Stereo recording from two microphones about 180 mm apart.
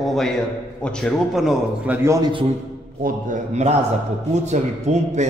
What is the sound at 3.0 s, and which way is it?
A man's voice, 45° right (ahead or behind).